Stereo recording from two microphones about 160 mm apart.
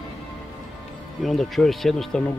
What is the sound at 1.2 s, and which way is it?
A man's voice, centre (ahead or behind).